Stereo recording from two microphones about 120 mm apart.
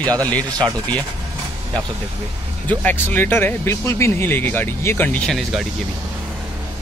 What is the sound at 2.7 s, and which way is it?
Speech, 15° left (ahead or behind).